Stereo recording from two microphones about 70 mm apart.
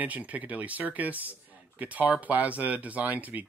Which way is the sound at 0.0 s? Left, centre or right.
Right.